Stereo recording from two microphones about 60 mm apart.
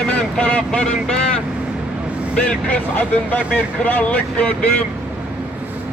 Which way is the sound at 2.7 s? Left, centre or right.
Left.